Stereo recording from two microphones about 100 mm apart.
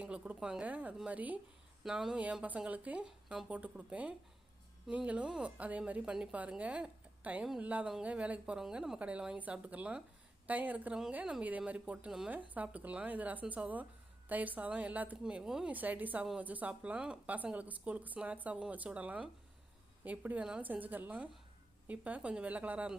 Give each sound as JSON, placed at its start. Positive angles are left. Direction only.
{"t": 0.0, "sound": "a woman's voice", "side_deg": -10}